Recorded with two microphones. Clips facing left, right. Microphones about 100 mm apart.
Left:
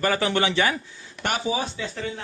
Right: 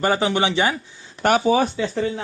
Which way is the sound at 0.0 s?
25° right (ahead or behind).